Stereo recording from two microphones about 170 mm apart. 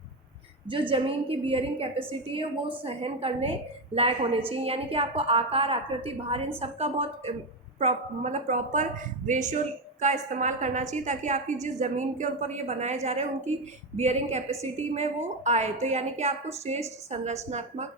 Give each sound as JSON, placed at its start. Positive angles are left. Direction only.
{"t": 0.7, "sound": "a woman's voice", "side_deg": -30}